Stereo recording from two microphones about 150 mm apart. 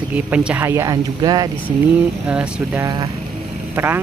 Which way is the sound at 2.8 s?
20° right (ahead or behind).